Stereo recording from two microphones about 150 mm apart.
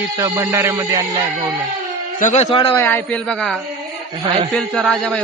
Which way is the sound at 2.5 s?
35° left (ahead or behind).